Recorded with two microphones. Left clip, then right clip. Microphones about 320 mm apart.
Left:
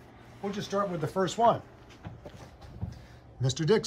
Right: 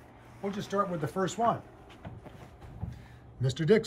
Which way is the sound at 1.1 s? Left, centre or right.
Left.